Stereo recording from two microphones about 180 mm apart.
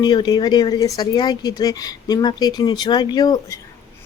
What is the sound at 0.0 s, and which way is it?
Speech, 25° left (ahead or behind).